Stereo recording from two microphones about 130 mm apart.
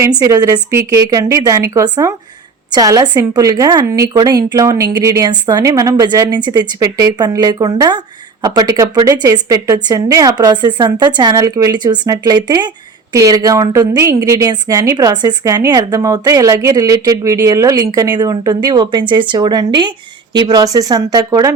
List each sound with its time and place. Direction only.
0.3 s speech: 30° right (ahead or behind)